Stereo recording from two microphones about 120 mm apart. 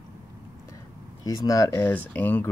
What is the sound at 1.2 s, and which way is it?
Speech, 30° left (ahead or behind).